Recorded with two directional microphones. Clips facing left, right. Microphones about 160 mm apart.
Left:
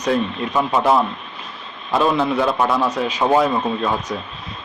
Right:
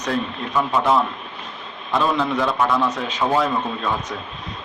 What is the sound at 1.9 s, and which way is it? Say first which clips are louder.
Speech: left 3 dB; 10° left (ahead or behind).